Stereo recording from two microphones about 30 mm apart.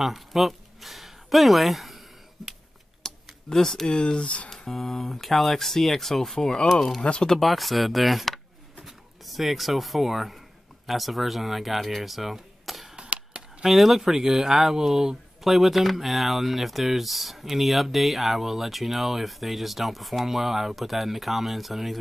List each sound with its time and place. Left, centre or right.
0.0 s speech: centre
3.0 s a sound: centre
3.8 s speech: left
4.7 s speech: centre
6.3 s speech: centre
7.0 s speech: left
7.3 s speech: centre
10.9 s cap gun: centre
13.7 s speech: centre
15.4 s speech: centre